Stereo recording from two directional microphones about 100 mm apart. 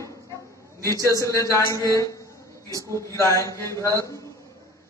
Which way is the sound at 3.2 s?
30° left (ahead or behind).